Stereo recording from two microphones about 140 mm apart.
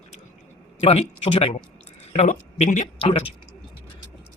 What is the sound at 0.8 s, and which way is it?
Speech, 45° left (ahead or behind).